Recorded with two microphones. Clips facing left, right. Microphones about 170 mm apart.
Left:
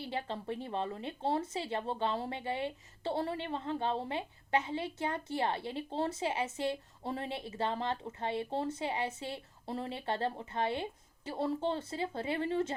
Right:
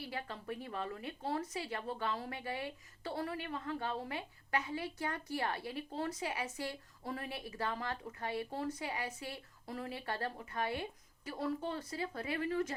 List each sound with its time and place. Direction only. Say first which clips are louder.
0.0 s a woman's voice: left 5 dB; 25° left (ahead or behind)